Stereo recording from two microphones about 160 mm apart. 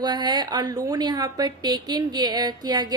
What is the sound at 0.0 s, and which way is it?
A woman's voice, 25° right (ahead or behind).